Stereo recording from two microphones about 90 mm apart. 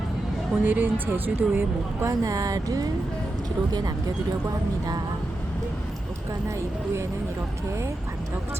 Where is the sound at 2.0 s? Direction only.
40° right (ahead or behind).